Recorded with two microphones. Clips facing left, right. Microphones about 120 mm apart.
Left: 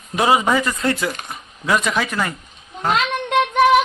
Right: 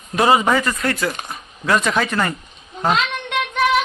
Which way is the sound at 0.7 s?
25° left (ahead or behind).